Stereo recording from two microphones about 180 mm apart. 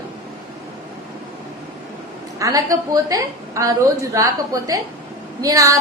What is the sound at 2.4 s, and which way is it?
A woman's voice, 20° right (ahead or behind).